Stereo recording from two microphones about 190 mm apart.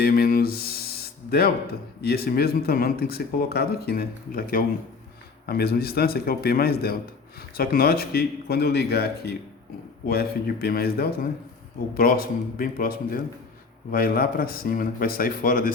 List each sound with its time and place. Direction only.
0.0 s speech: 50° left (ahead or behind)
2.0 s speech: 55° left (ahead or behind)